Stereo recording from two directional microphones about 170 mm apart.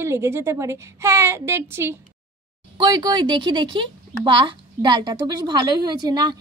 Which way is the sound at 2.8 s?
25° right (ahead or behind).